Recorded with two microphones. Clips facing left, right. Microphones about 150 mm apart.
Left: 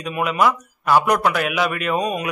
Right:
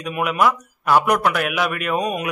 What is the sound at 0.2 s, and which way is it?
A man's voice, 5° right (ahead or behind).